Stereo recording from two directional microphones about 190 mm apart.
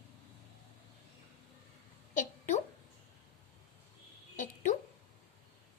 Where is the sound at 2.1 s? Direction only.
45° left (ahead or behind).